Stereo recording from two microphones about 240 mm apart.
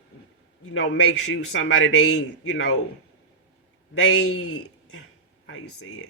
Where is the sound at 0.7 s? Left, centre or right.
Left.